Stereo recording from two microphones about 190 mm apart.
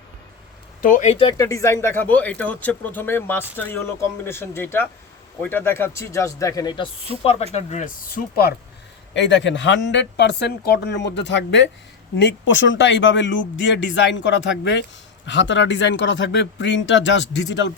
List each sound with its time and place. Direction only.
0.8 s speech: 45° left (ahead or behind)
1.2 s speech: 20° left (ahead or behind)
7.5 s speech: 40° left (ahead or behind)
9.1 s speech: 70° left (ahead or behind)